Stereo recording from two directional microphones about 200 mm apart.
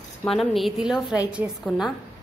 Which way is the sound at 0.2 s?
Centre (ahead or behind).